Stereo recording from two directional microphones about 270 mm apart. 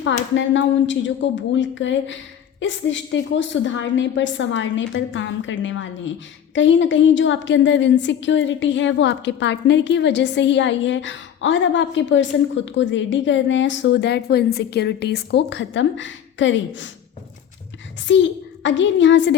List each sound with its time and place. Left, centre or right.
0.3 s a woman's voice: left
18.1 s a woman's voice: left